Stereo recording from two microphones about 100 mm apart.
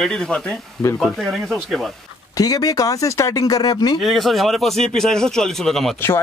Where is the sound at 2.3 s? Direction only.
35° left (ahead or behind).